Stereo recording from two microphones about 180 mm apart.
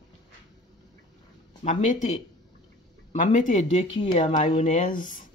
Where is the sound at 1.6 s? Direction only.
40° left (ahead or behind).